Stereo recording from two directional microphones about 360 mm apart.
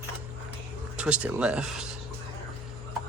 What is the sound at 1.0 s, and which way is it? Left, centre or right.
Speech, centre.